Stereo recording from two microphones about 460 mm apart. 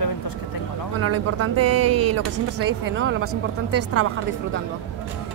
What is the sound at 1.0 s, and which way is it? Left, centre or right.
Speech, right.